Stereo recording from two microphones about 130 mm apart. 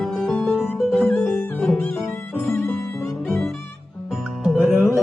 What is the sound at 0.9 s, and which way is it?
Music, 15° left (ahead or behind).